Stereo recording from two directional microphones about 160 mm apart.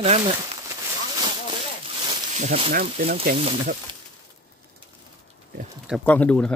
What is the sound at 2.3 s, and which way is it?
Speech, 50° right (ahead or behind).